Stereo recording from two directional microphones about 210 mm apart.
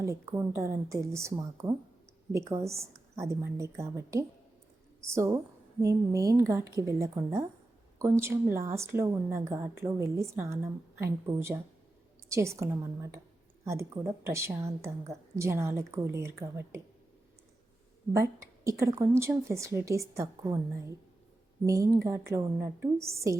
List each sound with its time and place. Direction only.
0.0 s a woman's voice: 15° right (ahead or behind)
18.1 s a woman's voice: 15° right (ahead or behind)